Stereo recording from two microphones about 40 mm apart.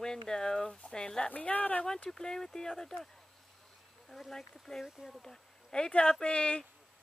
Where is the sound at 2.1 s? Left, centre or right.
Centre.